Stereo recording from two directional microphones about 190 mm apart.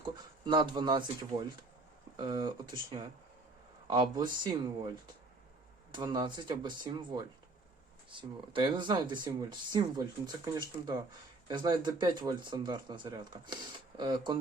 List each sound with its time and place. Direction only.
0.0 s speech: 25° right (ahead or behind)
5.9 s speech: 25° right (ahead or behind)